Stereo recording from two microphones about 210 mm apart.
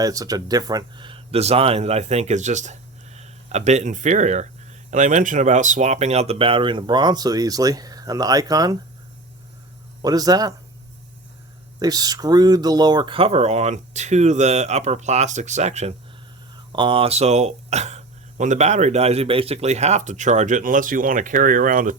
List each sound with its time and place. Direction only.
0.0 s speech: 15° right (ahead or behind)
10.0 s speech: 20° right (ahead or behind)
11.8 s speech: 20° right (ahead or behind); by 21.9 s 40° right (ahead or behind)